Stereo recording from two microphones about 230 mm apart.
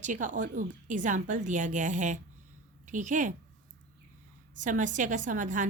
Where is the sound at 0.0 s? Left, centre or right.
Right.